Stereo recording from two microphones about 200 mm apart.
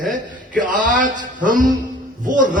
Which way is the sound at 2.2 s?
40° right (ahead or behind).